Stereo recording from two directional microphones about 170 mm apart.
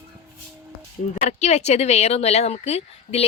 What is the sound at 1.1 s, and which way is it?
Speech, 45° left (ahead or behind).